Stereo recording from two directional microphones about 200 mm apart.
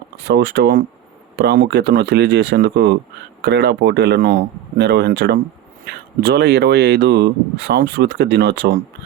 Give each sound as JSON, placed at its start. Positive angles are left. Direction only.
{"t": 0.2, "sound": "speech", "side_deg": -55}